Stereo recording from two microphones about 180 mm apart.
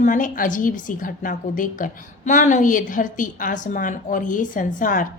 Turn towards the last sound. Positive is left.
turn(degrees=45)  # may be behind; listen again after turning